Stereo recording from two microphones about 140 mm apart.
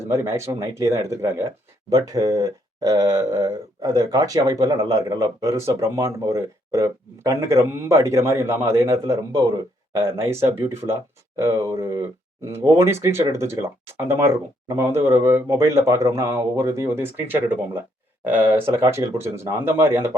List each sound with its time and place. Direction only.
0.1 s speech: 20° right (ahead or behind)